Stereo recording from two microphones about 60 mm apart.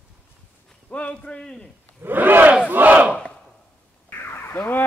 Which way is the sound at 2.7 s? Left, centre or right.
Right.